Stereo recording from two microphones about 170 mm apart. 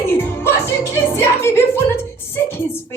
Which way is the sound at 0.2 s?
15° left (ahead or behind).